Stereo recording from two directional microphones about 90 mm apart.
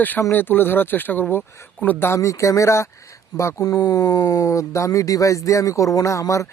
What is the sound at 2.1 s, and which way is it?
Speech, 35° left (ahead or behind).